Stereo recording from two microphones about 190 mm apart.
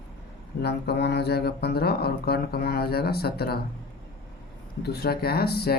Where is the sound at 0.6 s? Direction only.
60° left (ahead or behind).